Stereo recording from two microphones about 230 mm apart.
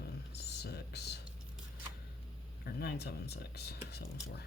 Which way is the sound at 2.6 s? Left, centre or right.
Left.